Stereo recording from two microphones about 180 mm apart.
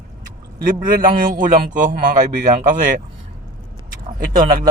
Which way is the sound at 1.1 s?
50° right (ahead or behind).